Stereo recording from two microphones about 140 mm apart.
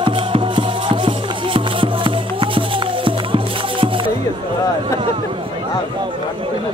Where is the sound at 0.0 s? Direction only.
40° right (ahead or behind).